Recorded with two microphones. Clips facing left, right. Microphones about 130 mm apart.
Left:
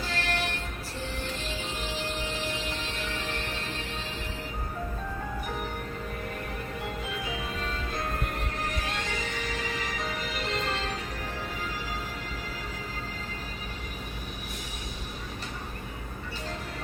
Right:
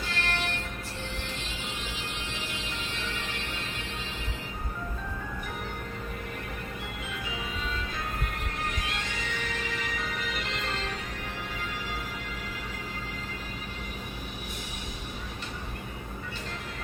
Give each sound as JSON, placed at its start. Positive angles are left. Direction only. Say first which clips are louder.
{"t": 0.1, "sound": "music", "louder": "left 1 dB", "side_deg": 40}
{"t": 8.8, "sound": "music", "louder": "left 2 dB", "side_deg": 40}